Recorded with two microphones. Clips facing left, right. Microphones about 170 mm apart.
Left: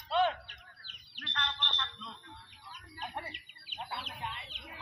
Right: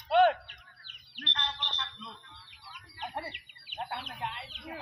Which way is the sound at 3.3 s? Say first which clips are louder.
Right 5 dB; 60° right (ahead or behind).